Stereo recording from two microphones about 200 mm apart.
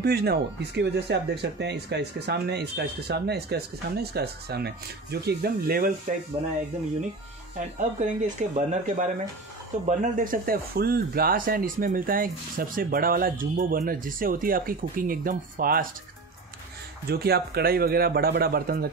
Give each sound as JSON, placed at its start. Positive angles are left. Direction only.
{"t": 0.0, "sound": "speech", "side_deg": -55}
{"t": 7.5, "sound": "speech", "side_deg": -40}
{"t": 17.1, "sound": "speech", "side_deg": -50}